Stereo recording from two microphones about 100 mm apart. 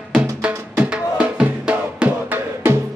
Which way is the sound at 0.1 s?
10° right (ahead or behind).